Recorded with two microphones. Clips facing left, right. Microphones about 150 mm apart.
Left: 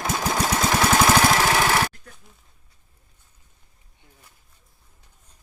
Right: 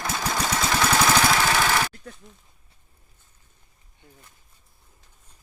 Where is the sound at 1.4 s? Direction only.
10° left (ahead or behind).